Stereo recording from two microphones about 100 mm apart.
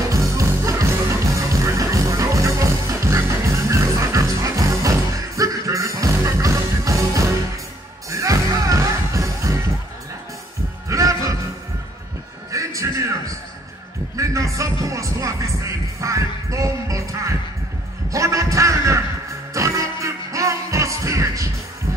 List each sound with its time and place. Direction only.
0.1 s music: 35° right (ahead or behind)
10.9 s music: 35° right (ahead or behind)
12.4 s music: 30° right (ahead or behind)
14.1 s music: 30° right (ahead or behind)
18.1 s a sound: 30° right (ahead or behind)
19.5 s music: 30° right (ahead or behind)